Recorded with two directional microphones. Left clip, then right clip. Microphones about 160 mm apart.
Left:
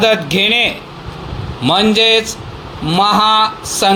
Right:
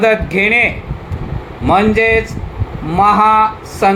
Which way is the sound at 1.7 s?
65° left (ahead or behind).